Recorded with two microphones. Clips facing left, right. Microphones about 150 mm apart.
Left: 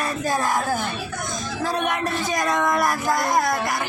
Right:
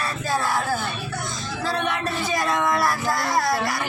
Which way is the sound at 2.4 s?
20° left (ahead or behind).